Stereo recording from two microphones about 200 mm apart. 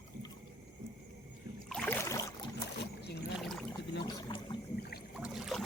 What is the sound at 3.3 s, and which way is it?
Pour, centre (ahead or behind).